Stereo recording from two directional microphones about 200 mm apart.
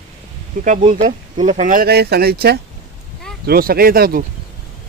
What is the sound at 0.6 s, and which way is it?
Speech, 35° right (ahead or behind).